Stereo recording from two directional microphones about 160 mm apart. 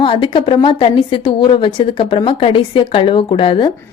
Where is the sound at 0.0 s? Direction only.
30° left (ahead or behind).